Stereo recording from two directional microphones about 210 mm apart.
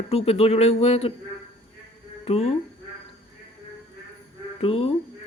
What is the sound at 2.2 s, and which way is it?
Speech, 30° left (ahead or behind).